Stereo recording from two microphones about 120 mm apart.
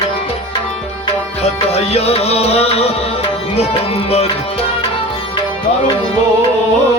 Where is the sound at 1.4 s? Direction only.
60° left (ahead or behind).